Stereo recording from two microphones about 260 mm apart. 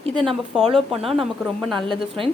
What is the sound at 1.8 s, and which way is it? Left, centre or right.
Speech, centre.